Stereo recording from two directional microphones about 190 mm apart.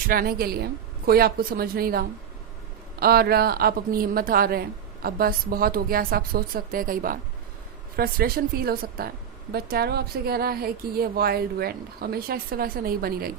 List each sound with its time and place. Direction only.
0.1 s a woman's voice: 50° right (ahead or behind)